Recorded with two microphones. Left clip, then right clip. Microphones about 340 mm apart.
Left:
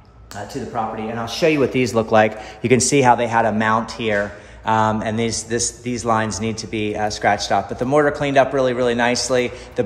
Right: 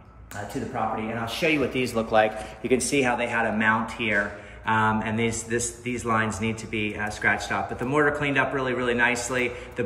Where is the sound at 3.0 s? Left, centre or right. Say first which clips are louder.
Left 11 dB; centre.